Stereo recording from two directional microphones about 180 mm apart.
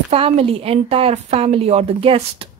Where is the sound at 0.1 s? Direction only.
30° right (ahead or behind).